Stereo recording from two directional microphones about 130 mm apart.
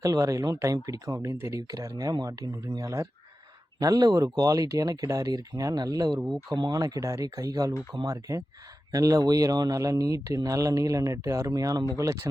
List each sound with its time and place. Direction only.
0.0 s speech: 25° right (ahead or behind)